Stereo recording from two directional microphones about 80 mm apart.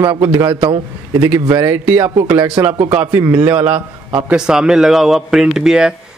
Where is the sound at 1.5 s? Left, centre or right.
Right.